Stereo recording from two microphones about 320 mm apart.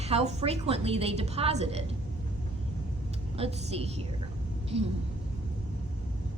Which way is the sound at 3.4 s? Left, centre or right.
Centre.